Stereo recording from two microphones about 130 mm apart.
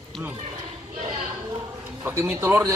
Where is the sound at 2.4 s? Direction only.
20° right (ahead or behind).